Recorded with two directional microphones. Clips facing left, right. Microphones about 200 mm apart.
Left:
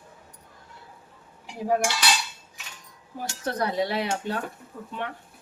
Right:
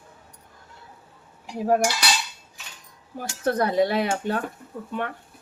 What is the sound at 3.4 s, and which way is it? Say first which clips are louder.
Speech: right 6 dB; 55° right (ahead or behind).